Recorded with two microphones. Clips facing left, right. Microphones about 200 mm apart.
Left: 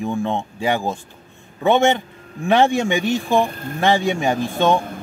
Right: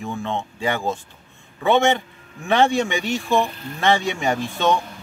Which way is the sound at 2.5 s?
15° left (ahead or behind).